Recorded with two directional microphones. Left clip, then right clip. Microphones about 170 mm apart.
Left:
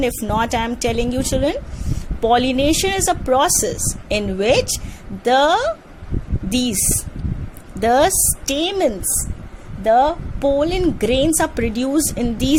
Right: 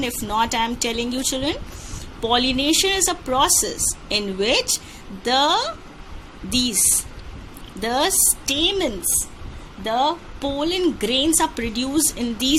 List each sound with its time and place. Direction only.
0.0 s a woman's voice: 60° left (ahead or behind); by 10.5 s 90° left
10.6 s a woman's voice: 75° left (ahead or behind)